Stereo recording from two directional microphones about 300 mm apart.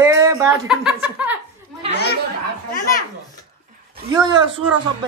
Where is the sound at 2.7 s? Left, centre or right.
Left.